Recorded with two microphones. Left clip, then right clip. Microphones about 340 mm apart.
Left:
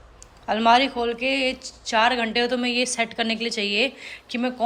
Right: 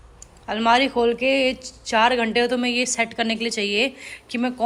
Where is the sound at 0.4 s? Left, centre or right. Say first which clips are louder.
Left 1 dB; centre.